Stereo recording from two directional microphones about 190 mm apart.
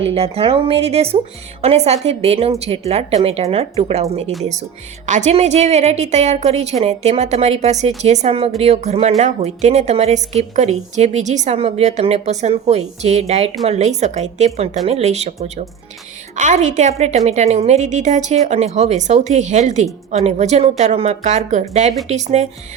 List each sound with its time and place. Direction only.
0.1 s a woman's voice: 30° right (ahead or behind)
5.0 s a woman's voice: 40° right (ahead or behind)